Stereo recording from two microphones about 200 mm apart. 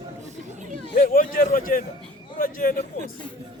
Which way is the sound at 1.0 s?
45° left (ahead or behind).